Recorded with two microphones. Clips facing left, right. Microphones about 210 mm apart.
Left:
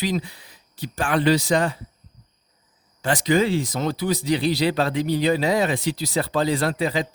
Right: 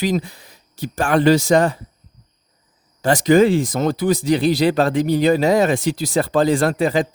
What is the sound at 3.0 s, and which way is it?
Speech, 45° right (ahead or behind).